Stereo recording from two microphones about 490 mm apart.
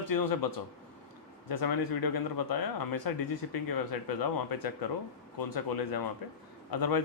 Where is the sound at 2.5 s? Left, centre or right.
Left.